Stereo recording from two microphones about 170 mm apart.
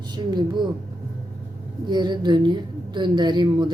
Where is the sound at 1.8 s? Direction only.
25° right (ahead or behind).